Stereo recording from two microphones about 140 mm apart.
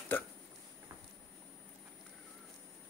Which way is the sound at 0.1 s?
15° left (ahead or behind).